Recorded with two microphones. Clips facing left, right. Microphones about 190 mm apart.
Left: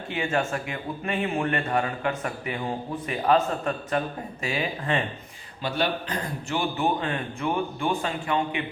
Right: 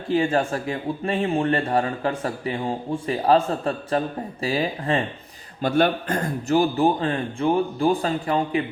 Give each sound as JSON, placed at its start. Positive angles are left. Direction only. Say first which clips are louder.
{"t": 0.1, "sound": "speech", "louder": "right 6 dB", "side_deg": -35}
{"t": 5.6, "sound": "speech", "louder": "right 7 dB", "side_deg": -50}